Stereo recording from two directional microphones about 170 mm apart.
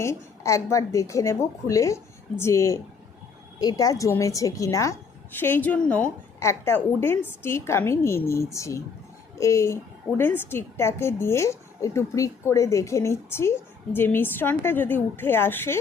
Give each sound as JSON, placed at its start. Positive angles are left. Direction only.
{"t": 0.0, "sound": "a woman's voice", "side_deg": 15}